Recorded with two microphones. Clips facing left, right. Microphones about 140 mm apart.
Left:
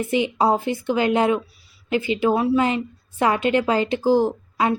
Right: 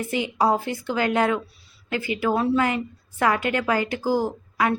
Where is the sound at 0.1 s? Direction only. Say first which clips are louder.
Left 2 dB; 20° left (ahead or behind).